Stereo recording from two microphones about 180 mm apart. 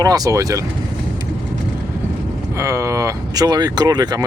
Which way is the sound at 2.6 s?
15° right (ahead or behind).